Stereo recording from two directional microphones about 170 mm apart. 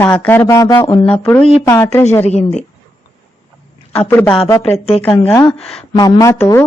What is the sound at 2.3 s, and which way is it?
Speech, 40° left (ahead or behind).